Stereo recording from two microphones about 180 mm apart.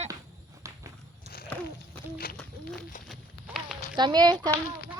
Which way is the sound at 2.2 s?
55° left (ahead or behind).